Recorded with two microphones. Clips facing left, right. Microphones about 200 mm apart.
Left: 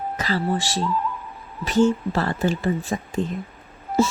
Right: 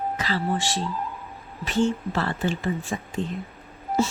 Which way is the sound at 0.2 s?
40° left (ahead or behind).